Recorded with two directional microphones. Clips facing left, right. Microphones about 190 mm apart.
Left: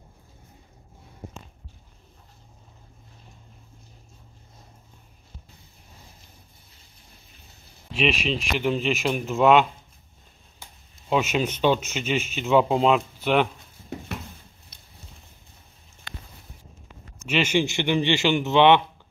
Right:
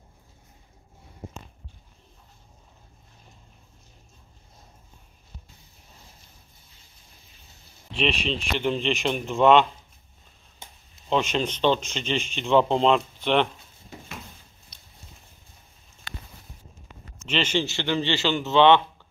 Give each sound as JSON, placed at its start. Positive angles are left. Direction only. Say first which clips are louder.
{"t": 7.9, "sound": "speech", "louder": "left 2 dB", "side_deg": 0}
{"t": 10.6, "sound": "a sound", "louder": "right 1 dB", "side_deg": -20}
{"t": 11.1, "sound": "speech", "louder": "left 1 dB", "side_deg": 5}
{"t": 17.3, "sound": "speech", "louder": "left 3 dB", "side_deg": 10}